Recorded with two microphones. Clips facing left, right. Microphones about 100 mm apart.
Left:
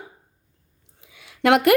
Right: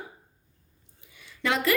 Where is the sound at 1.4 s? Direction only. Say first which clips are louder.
Left 10 dB; 65° left (ahead or behind).